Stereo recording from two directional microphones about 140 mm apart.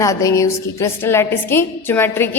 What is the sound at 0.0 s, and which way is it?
A woman's voice, 25° left (ahead or behind).